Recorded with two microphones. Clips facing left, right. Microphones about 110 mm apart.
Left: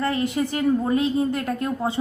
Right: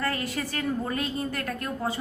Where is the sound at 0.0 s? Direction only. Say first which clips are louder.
Left 7 dB; 20° left (ahead or behind).